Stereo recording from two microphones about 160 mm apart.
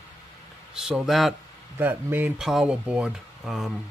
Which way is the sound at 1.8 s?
10° right (ahead or behind).